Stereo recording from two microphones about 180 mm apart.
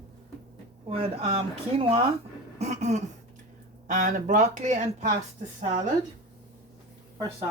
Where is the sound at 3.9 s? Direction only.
45° right (ahead or behind).